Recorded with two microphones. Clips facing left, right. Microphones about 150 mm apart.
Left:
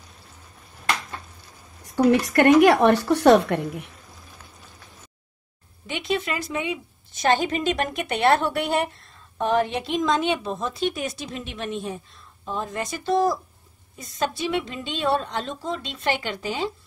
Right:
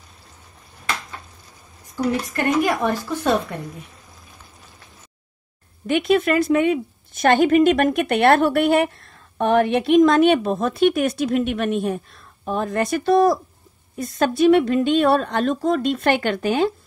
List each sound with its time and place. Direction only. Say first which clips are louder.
2.0 s a woman's voice: left 5 dB; 70° left (ahead or behind)
5.9 s a woman's voice: right 9 dB; 55° right (ahead or behind)